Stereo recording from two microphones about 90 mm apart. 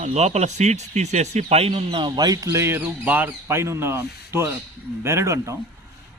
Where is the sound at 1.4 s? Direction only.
90° right; by 3.3 s 20° right (ahead or behind).